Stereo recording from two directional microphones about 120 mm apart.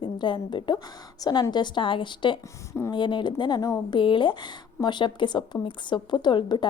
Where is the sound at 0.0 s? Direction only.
40° left (ahead or behind).